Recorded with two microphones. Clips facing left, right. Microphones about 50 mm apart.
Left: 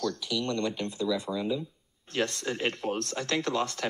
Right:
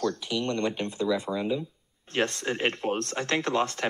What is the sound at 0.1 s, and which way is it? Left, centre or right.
Speech, right.